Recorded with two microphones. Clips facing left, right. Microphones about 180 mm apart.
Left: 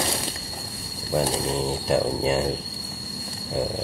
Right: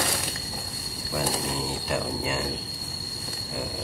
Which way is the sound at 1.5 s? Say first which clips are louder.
Left 6 dB; 30° left (ahead or behind).